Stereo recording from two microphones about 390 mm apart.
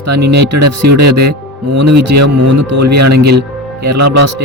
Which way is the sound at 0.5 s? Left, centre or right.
Right.